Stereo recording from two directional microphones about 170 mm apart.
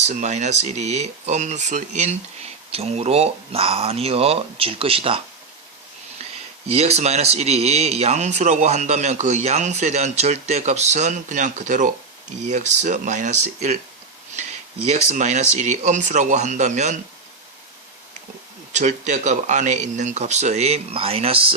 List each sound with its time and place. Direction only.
0.0 s speech: 40° right (ahead or behind)
6.7 s speech: 40° right (ahead or behind)
14.8 s speech: 45° right (ahead or behind)
18.7 s speech: 45° right (ahead or behind)